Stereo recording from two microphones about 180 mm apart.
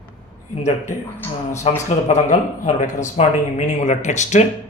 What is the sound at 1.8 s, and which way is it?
Speech, 40° left (ahead or behind).